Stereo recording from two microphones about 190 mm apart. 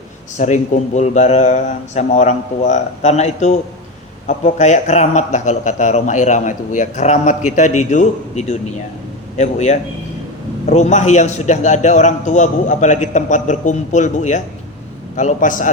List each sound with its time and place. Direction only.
0.3 s a man's voice: 40° left (ahead or behind)